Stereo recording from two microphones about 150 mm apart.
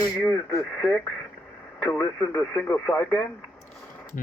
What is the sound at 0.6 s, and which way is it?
Speech, 5° left (ahead or behind).